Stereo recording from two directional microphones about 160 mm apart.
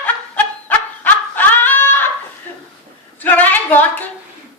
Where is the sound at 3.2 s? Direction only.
10° left (ahead or behind).